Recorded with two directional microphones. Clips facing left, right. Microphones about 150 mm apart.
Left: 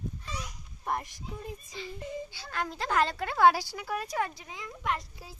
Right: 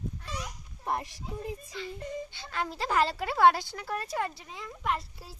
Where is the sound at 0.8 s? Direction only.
30° right (ahead or behind).